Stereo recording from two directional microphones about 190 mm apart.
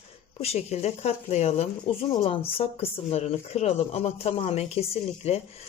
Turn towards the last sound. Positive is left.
turn(degrees=35)  # may be behind; listen again after turning